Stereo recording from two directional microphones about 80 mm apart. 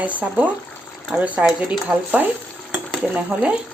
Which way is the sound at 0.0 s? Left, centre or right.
Centre.